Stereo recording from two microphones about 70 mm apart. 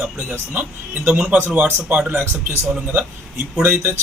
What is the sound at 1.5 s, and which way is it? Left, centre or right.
Speech, right.